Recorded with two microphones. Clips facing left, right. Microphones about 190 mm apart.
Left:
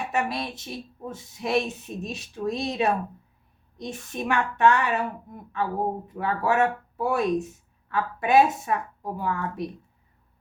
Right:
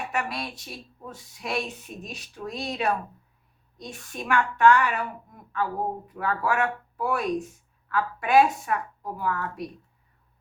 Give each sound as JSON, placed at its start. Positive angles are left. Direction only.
{"t": 0.1, "sound": "speech", "side_deg": 25}